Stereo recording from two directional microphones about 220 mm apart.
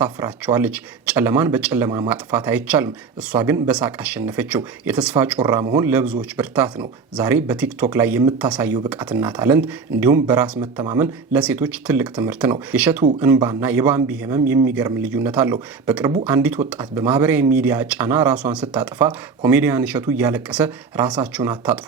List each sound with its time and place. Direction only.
0.0 s a man's voice: 10° right (ahead or behind)
19.0 s speech: 20° right (ahead or behind)
19.5 s a man's voice: 10° right (ahead or behind)